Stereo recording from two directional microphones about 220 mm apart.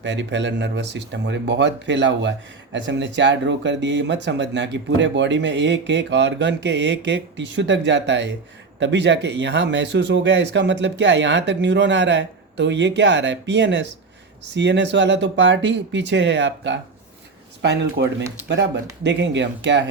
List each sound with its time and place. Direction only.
0.0 s speech: 55° right (ahead or behind)